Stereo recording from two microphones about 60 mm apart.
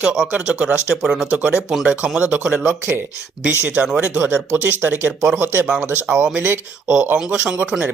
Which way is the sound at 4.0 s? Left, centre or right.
Right.